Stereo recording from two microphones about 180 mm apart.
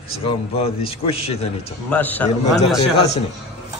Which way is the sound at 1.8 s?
10° left (ahead or behind).